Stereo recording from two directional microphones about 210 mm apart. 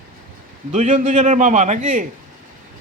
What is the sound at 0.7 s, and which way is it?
A man's voice, 35° right (ahead or behind).